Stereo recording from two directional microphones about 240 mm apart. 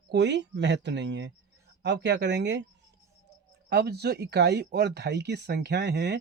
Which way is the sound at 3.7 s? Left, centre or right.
Right.